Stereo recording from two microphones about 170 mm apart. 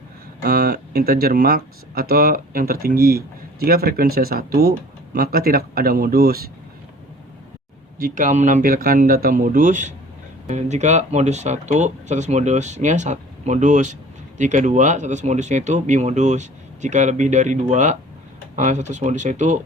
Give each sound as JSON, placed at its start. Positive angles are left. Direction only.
{"t": 0.4, "sound": "speech", "side_deg": -60}
{"t": 7.9, "sound": "speech", "side_deg": -55}